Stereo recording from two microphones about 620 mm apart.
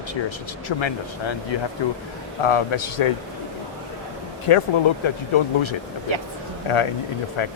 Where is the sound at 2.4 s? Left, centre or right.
Left.